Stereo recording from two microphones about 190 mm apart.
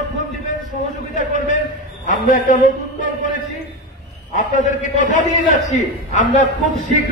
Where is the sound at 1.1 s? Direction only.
40° left (ahead or behind).